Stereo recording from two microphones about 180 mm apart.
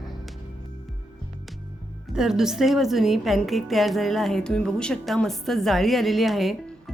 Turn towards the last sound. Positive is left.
turn(degrees=0)  # may be behind; listen again after turning